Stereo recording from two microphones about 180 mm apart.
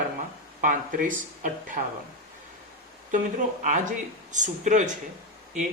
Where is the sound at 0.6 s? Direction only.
45° right (ahead or behind).